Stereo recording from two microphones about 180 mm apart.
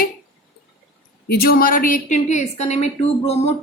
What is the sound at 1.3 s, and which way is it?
A woman's voice, 55° left (ahead or behind).